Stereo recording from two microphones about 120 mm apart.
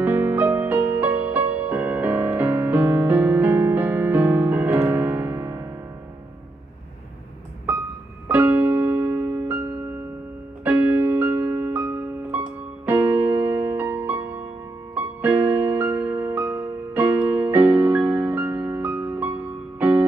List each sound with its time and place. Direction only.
0.0 s music: 15° right (ahead or behind)
8.3 s keyboard: 15° right (ahead or behind)
10.6 s music: 15° right (ahead or behind)